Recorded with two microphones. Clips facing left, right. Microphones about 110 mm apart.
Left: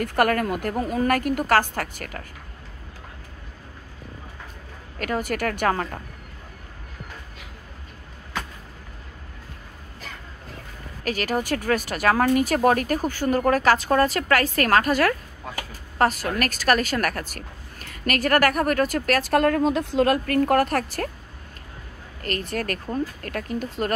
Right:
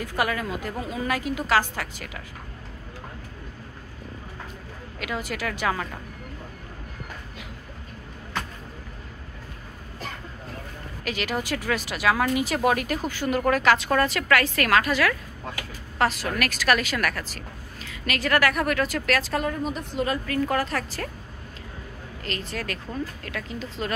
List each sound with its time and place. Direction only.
0.0 s a woman's voice: 55° left (ahead or behind)
4.9 s speech: 45° left (ahead or behind)
11.1 s speech: 40° left (ahead or behind)
19.3 s speech: 70° left (ahead or behind)
20.0 s a woman's voice: 65° left (ahead or behind)
22.2 s speech: 50° left (ahead or behind)